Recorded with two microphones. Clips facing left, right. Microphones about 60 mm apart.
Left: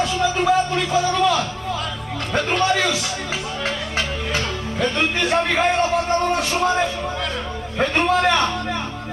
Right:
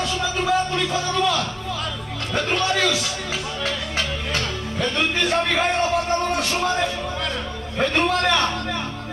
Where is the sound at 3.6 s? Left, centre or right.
Centre.